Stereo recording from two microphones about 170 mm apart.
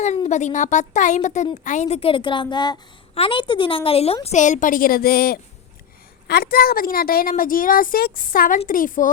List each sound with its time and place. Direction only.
0.3 s a woman's voice: 45° left (ahead or behind)